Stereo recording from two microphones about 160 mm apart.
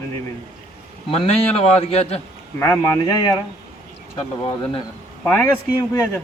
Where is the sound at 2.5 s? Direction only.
15° left (ahead or behind).